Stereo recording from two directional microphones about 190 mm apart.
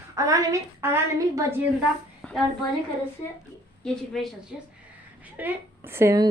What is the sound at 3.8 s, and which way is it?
Speech, centre (ahead or behind).